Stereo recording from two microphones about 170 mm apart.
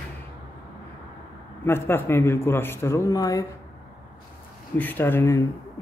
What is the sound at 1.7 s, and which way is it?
Speech, 15° left (ahead or behind).